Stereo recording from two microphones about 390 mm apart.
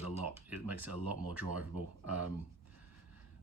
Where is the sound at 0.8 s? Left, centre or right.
Right.